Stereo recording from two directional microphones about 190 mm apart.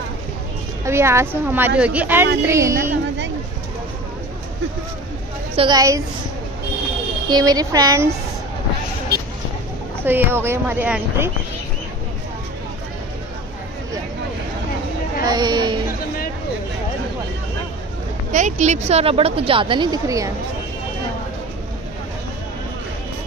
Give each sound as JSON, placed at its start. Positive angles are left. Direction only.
{"t": 0.8, "sound": "speech", "side_deg": -15}
{"t": 5.6, "sound": "speech", "side_deg": -20}
{"t": 7.2, "sound": "speech", "side_deg": -20}
{"t": 10.0, "sound": "speech", "side_deg": -10}
{"t": 15.2, "sound": "speech", "side_deg": -20}
{"t": 18.3, "sound": "a woman's voice", "side_deg": -40}